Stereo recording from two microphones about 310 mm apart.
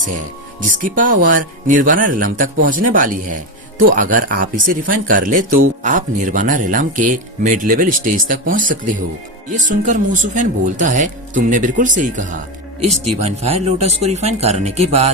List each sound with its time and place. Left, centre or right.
0.6 s speech: right